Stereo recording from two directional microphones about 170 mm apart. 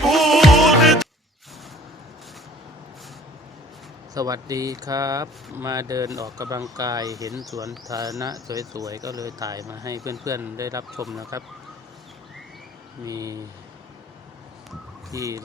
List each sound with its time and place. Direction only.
0.0 s music: centre (ahead or behind)
4.1 s speech: 20° right (ahead or behind)
13.1 s speech: 20° right (ahead or behind)
15.1 s speech: 20° right (ahead or behind)